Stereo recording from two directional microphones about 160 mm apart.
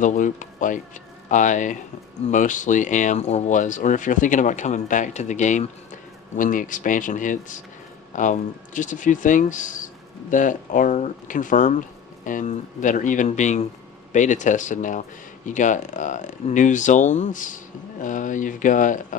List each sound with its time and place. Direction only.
0.0 s speech: 50° left (ahead or behind)